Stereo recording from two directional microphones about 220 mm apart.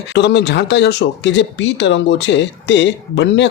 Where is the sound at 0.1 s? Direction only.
50° left (ahead or behind).